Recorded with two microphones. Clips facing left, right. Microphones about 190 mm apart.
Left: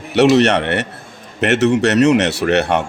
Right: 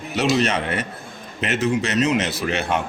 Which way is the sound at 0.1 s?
70° left (ahead or behind).